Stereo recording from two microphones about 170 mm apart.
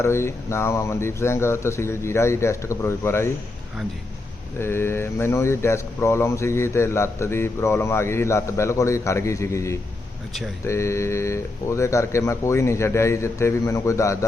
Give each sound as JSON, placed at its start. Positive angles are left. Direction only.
{"t": 0.0, "sound": "speech", "side_deg": 15}
{"t": 4.6, "sound": "speech", "side_deg": 15}